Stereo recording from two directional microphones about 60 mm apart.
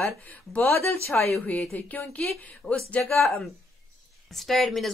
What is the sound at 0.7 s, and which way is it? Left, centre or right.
Speech, left.